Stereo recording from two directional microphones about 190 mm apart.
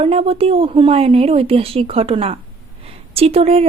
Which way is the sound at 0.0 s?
30° right (ahead or behind).